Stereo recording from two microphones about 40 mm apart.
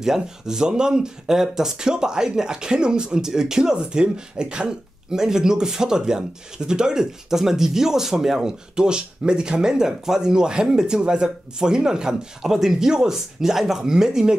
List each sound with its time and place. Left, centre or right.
0.0 s speech: centre